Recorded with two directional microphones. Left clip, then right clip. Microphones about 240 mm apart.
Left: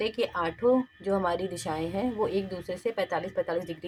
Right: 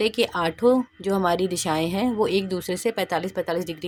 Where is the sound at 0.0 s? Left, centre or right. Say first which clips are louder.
Right 6 dB; right.